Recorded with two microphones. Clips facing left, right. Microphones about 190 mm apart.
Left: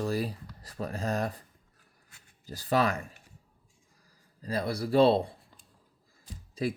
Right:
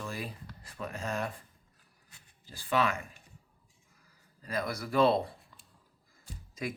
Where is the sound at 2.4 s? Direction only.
40° left (ahead or behind).